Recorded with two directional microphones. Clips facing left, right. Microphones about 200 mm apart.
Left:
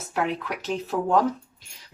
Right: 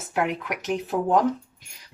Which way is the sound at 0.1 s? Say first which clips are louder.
Right 1 dB; 15° right (ahead or behind).